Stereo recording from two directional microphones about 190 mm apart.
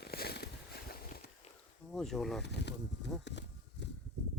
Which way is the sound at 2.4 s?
60° left (ahead or behind).